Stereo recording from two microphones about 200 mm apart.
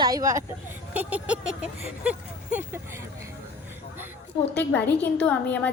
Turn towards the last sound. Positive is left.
turn(degrees=5)  # may be behind; listen again after turning